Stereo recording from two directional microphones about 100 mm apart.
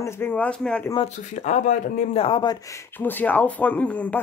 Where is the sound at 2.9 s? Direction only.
20° left (ahead or behind).